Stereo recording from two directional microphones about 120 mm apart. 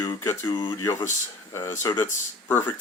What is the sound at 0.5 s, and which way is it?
Speech, 40° left (ahead or behind).